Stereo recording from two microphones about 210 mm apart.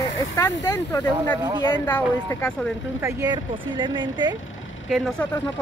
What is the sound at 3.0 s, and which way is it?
Speech, 15° right (ahead or behind).